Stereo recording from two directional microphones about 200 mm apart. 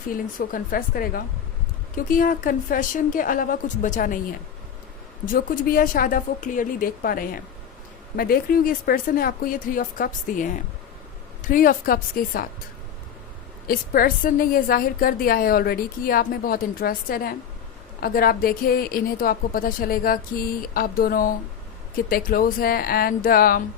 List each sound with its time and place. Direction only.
0.3 s a woman's voice: 45° left (ahead or behind)
13.7 s a woman's voice: 45° left (ahead or behind)